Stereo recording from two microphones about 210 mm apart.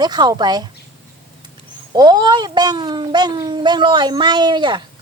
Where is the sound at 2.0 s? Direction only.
20° right (ahead or behind).